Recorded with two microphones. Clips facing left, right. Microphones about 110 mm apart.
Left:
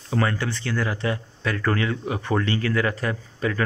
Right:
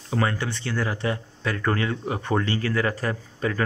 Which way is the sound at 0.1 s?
20° right (ahead or behind).